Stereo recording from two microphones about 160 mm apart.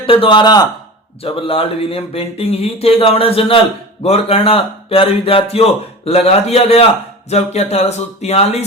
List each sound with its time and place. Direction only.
0.0 s speech: 35° left (ahead or behind)
1.2 s speech: 35° left (ahead or behind)